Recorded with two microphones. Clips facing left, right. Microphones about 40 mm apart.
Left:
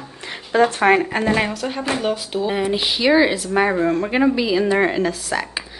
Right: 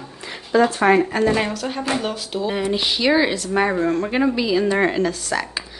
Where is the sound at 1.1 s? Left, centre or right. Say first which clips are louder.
Even; left.